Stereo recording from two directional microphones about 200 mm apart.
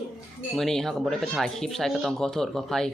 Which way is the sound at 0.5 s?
Centre (ahead or behind).